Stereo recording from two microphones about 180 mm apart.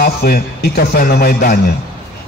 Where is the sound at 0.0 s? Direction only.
55° left (ahead or behind).